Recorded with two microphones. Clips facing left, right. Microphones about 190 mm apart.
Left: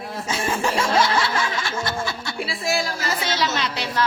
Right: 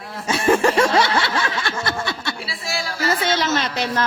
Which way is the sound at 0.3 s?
70° right (ahead or behind).